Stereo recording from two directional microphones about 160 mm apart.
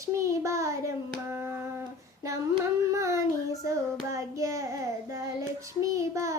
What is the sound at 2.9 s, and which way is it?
Child singing, 20° right (ahead or behind).